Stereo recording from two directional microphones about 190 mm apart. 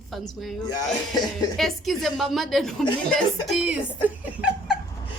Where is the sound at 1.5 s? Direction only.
Centre (ahead or behind).